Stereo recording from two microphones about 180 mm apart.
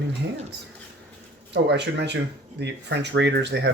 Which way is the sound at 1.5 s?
75° right (ahead or behind).